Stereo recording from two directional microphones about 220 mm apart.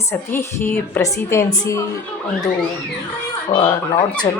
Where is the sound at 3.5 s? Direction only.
25° left (ahead or behind).